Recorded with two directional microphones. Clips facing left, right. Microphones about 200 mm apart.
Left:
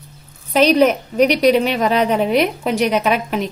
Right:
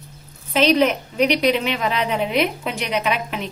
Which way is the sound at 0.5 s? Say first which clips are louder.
Left 4 dB; 40° left (ahead or behind).